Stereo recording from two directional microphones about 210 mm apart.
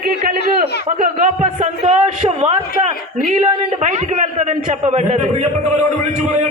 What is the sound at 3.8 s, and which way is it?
A man's voice, 35° right (ahead or behind).